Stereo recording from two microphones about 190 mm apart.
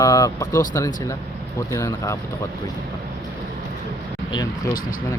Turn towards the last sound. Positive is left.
turn(degrees=20)  # may be behind; listen again after turning